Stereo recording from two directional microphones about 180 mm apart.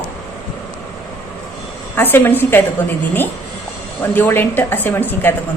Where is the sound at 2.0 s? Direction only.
10° left (ahead or behind).